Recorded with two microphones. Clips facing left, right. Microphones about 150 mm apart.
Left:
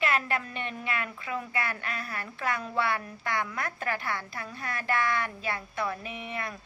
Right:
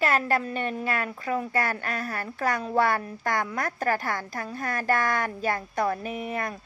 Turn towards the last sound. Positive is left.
turn(degrees=-45)  # may be behind; listen again after turning